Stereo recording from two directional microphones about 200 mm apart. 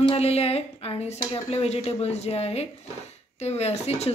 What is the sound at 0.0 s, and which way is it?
Speech, 30° left (ahead or behind).